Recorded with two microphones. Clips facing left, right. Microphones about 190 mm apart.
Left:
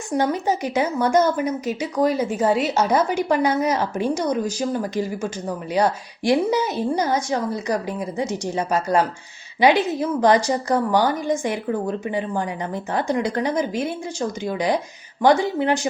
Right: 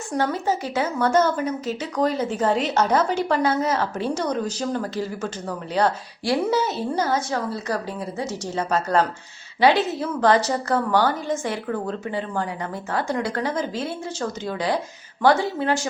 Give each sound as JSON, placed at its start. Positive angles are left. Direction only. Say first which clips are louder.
{"t": 0.2, "sound": "speech", "louder": "left 2 dB", "side_deg": 15}